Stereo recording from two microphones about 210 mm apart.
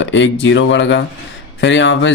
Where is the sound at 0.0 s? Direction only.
60° left (ahead or behind).